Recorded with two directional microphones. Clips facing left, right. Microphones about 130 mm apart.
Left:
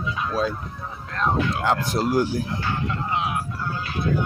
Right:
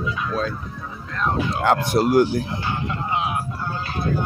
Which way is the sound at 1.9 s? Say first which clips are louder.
Right 7 dB; 65° right (ahead or behind).